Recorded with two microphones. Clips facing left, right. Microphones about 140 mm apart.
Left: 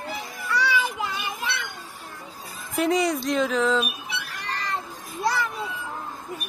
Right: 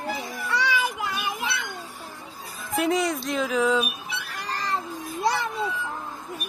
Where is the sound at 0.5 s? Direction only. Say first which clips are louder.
Left 1 dB; 15° right (ahead or behind).